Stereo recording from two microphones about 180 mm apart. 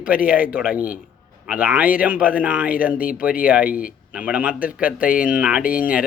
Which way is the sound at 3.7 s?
50° left (ahead or behind).